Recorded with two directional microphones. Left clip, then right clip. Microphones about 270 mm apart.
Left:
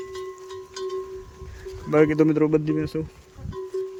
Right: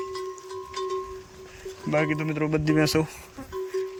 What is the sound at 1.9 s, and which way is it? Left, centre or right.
Speech, centre.